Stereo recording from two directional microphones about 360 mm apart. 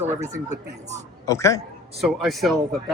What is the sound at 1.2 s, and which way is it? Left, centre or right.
Speech, centre.